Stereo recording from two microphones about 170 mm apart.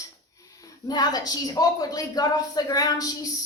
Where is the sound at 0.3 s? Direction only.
20° left (ahead or behind).